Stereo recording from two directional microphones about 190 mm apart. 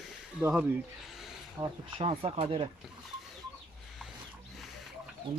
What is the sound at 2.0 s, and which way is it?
Speech, 30° right (ahead or behind).